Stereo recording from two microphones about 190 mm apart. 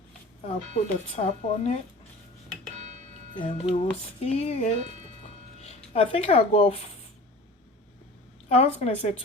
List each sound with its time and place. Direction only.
0.4 s speech: 35° left (ahead or behind)
2.5 s a sound: 40° right (ahead or behind)
3.3 s speech: 30° left (ahead or behind)
5.2 s music: 35° left (ahead or behind)
8.4 s speech: 35° left (ahead or behind)